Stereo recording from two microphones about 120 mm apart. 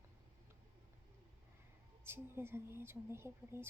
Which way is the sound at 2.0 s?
20° right (ahead or behind).